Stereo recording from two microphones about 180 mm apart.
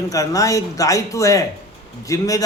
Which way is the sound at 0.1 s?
20° left (ahead or behind).